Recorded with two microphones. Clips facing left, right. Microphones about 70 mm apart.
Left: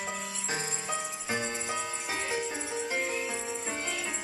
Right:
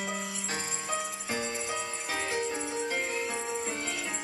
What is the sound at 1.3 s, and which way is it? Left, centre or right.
Jingle bell, left.